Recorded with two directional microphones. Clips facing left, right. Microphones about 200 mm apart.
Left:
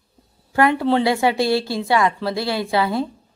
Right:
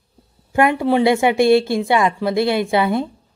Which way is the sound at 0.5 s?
20° right (ahead or behind).